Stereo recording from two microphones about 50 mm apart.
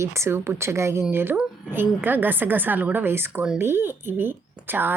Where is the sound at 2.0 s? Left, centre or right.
Right.